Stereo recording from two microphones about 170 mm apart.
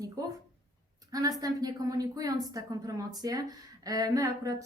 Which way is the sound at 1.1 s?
20° right (ahead or behind).